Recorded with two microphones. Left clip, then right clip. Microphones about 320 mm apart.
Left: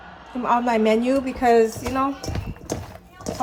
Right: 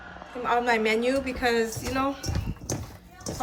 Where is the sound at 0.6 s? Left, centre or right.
Centre.